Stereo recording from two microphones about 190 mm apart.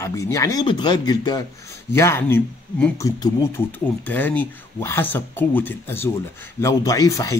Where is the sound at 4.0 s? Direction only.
10° left (ahead or behind).